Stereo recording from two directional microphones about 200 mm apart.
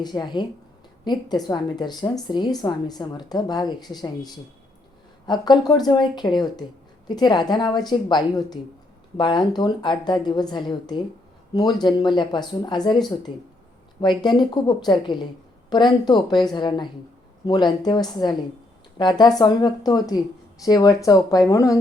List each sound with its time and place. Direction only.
0.0 s speech: 20° left (ahead or behind)